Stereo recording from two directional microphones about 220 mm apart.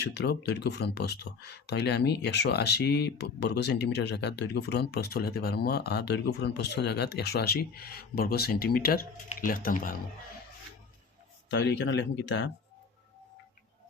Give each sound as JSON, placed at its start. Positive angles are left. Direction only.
{"t": 0.0, "sound": "speech", "side_deg": 50}
{"t": 11.5, "sound": "speech", "side_deg": 55}